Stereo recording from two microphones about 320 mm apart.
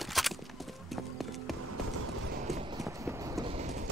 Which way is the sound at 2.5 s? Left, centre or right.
Centre.